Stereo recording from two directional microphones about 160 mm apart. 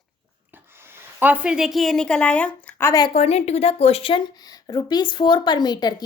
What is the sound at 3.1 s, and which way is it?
A woman's voice, 40° left (ahead or behind).